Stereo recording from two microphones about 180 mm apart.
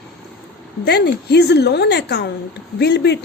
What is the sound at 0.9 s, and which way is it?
A woman's voice, 70° left (ahead or behind).